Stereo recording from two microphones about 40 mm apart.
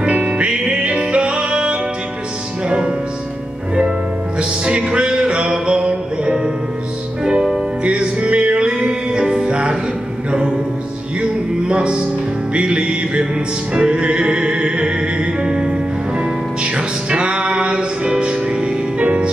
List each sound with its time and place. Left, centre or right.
0.0 s music: right
4.4 s music: right
7.2 s music: centre
7.8 s music: right
11.1 s music: right